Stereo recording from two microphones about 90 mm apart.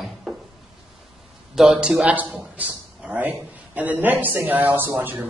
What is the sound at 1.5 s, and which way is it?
A man's voice, 5° right (ahead or behind).